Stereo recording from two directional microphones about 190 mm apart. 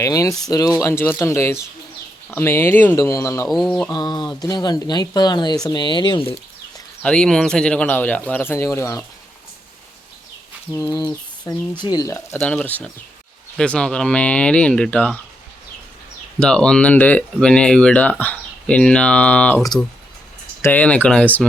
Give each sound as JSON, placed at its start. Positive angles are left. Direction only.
{"t": 0.0, "sound": "speech", "side_deg": 15}
{"t": 3.5, "sound": "speech", "side_deg": 0}
{"t": 3.9, "sound": "speech", "side_deg": 20}
{"t": 7.0, "sound": "speech", "side_deg": 5}
{"t": 11.5, "sound": "speech", "side_deg": 20}
{"t": 16.4, "sound": "speech", "side_deg": 5}